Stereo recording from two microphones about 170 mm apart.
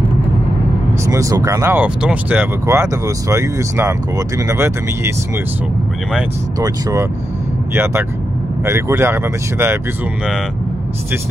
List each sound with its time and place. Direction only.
1.0 s speech: 20° right (ahead or behind)
6.6 s speech: 20° right (ahead or behind)